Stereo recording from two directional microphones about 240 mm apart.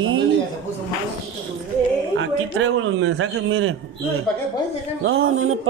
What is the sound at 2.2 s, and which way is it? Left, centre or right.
A man's voice, right.